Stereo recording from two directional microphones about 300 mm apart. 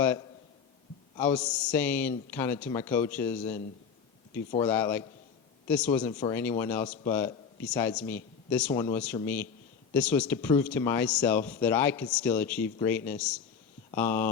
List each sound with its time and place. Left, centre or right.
1.1 s speech: centre